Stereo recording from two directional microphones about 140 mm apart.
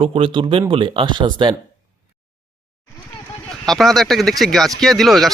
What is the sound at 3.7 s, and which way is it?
Speech, centre (ahead or behind).